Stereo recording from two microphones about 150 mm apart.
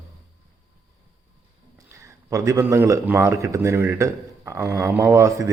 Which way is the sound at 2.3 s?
20° right (ahead or behind).